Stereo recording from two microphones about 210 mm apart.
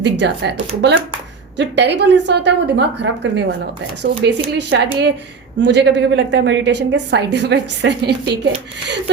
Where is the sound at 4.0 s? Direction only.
55° right (ahead or behind).